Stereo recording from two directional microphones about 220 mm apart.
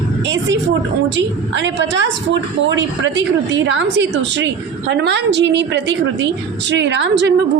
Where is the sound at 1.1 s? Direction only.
55° right (ahead or behind).